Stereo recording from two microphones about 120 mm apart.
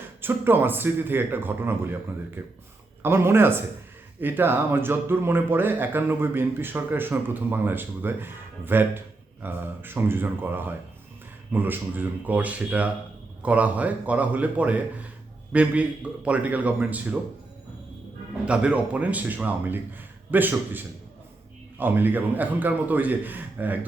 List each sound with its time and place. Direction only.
0.2 s speech: 15° right (ahead or behind)
18.4 s speech: 10° right (ahead or behind)